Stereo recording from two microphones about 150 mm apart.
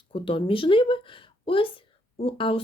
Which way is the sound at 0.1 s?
35° left (ahead or behind).